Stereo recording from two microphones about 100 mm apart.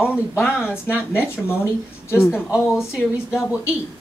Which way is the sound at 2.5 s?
5° right (ahead or behind).